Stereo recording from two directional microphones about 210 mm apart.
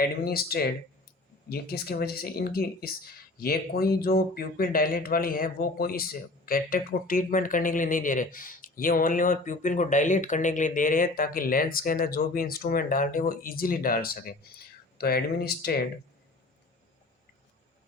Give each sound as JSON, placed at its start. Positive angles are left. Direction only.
{"t": 0.3, "sound": "speech", "side_deg": 45}